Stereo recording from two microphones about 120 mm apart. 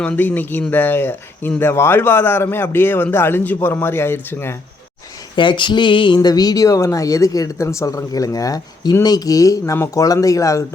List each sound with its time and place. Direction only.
0.0 s speech: 10° left (ahead or behind)
5.4 s a sound: 40° left (ahead or behind)
6.1 s speech: 35° left (ahead or behind)